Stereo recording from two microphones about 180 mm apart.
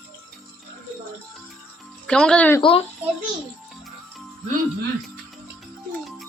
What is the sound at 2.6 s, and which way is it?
Speech, 30° left (ahead or behind).